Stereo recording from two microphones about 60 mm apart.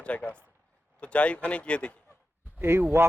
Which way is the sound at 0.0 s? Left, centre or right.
Left.